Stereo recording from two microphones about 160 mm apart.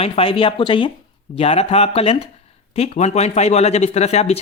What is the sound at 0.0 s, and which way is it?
Speech, 35° left (ahead or behind).